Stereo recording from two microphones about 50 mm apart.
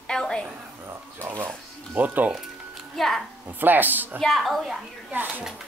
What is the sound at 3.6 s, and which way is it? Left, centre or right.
Speech, right.